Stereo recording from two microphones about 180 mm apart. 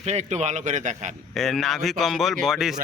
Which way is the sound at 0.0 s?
40° right (ahead or behind).